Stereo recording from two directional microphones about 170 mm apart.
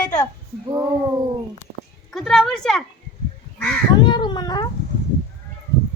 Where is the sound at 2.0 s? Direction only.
Centre (ahead or behind).